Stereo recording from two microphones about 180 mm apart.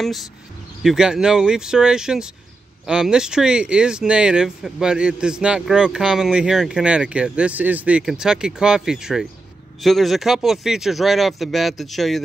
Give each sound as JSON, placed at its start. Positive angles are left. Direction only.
{"t": 0.8, "sound": "speech", "side_deg": -5}